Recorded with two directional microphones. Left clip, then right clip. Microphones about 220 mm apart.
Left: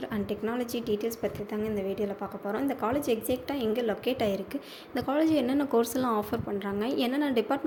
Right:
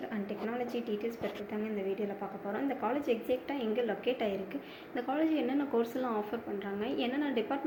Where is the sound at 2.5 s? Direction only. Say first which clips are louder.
Left 4 dB; 50° left (ahead or behind).